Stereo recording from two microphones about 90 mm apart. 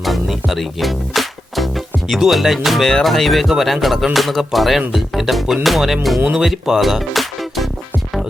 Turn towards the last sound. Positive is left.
turn(degrees=0)  # may be behind; listen again after turning